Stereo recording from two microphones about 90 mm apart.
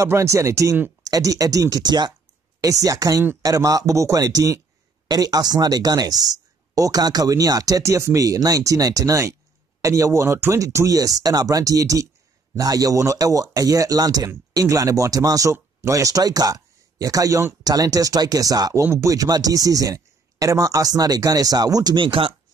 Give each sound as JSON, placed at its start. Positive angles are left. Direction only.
{"t": 0.0, "sound": "speech", "side_deg": -35}
{"t": 2.6, "sound": "speech", "side_deg": -40}
{"t": 17.6, "sound": "speech", "side_deg": -40}
{"t": 18.9, "sound": "speech", "side_deg": -30}
{"t": 19.1, "sound": "speech", "side_deg": -45}
{"t": 21.9, "sound": "speech", "side_deg": -70}